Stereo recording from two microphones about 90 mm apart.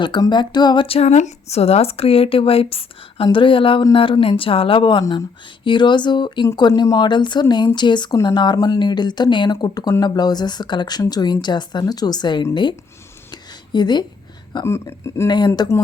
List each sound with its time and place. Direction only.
0.0 s speech: 55° left (ahead or behind)
1.8 s speech: 90° left
3.3 s a woman's voice: 75° left (ahead or behind); by 12.5 s 55° left (ahead or behind)
13.3 s a sound: 55° left (ahead or behind)
14.6 s speech: 30° left (ahead or behind)
15.3 s a woman's voice: 55° left (ahead or behind)